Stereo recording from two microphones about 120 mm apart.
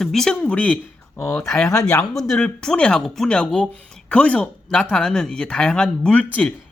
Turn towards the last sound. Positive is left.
turn(degrees=10)  # may be behind; listen again after turning